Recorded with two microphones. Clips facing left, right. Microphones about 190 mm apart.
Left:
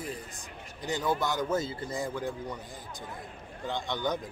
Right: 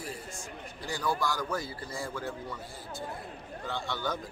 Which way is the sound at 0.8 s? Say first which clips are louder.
Left 2 dB; 20° left (ahead or behind).